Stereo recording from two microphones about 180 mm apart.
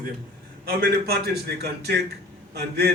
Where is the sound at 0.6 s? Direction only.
60° right (ahead or behind).